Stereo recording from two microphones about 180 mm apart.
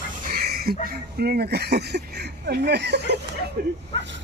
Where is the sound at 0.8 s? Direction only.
60° right (ahead or behind).